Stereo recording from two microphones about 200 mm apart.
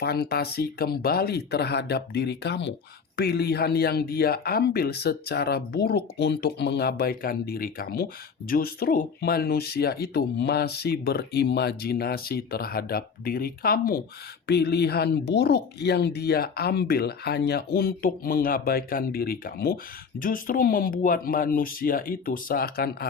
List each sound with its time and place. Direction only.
0.0 s speech: 50° left (ahead or behind)